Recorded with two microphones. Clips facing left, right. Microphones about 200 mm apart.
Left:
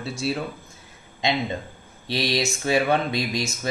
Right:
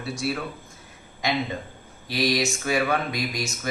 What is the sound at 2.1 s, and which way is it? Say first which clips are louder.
Speech: right 1 dB; 25° left (ahead or behind).